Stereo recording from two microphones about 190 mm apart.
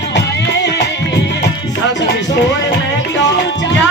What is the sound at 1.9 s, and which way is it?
Speech, 65° left (ahead or behind).